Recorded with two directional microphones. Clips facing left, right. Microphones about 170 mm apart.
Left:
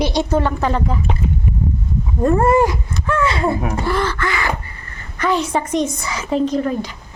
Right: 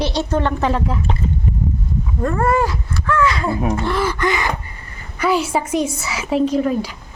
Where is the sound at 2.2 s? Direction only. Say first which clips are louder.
Left 4 dB; 25° left (ahead or behind).